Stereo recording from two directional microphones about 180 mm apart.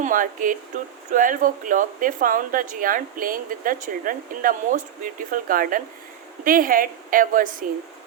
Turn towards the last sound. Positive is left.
turn(degrees=-50)  # may be behind; listen again after turning